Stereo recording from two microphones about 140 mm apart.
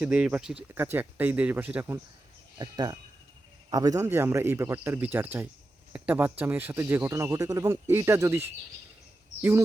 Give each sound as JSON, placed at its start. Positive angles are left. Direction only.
{"t": 0.0, "sound": "speech", "side_deg": -10}
{"t": 2.6, "sound": "speech", "side_deg": -30}